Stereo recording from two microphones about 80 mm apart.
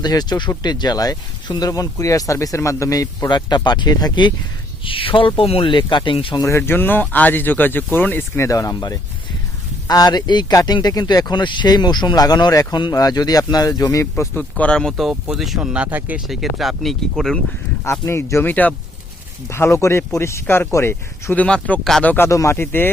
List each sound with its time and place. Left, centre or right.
0.0 s speech: left
3.2 s speech: left
4.9 s speech: left
6.4 s speech: left
8.4 s speech: left
14.5 s speech: centre
16.2 s speech: centre
18.0 s speech: left
21.3 s speech: centre
22.0 s speech: left
22.3 s speech: left
22.5 s speech: left